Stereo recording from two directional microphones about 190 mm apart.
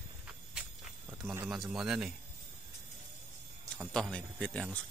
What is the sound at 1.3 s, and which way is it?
Speech, 5° right (ahead or behind).